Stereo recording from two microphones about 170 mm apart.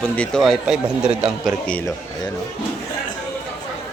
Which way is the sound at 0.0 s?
5° left (ahead or behind).